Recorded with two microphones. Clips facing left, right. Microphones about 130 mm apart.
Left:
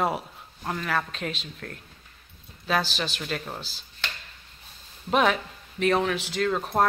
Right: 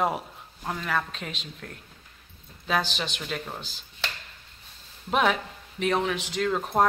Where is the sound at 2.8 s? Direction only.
20° right (ahead or behind).